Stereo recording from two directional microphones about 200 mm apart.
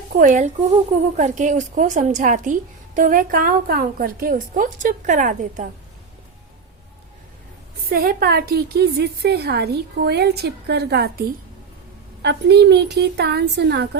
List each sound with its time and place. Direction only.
0.1 s speech: 40° right (ahead or behind)
7.9 s a woman's voice: 50° right (ahead or behind)